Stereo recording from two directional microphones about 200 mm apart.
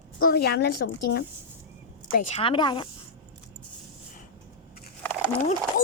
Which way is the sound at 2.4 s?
25° left (ahead or behind).